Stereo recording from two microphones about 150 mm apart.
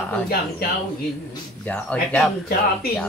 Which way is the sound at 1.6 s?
10° left (ahead or behind).